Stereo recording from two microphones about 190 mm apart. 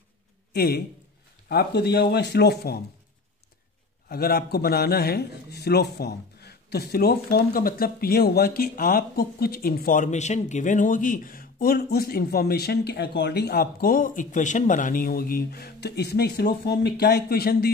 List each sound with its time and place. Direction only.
0.6 s a man's voice: 55° left (ahead or behind)
4.1 s a man's voice: 55° left (ahead or behind)